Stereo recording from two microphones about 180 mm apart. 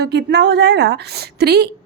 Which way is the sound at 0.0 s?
70° right (ahead or behind).